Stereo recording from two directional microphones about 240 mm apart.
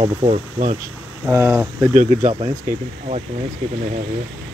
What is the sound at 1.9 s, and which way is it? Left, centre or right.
Speech, right.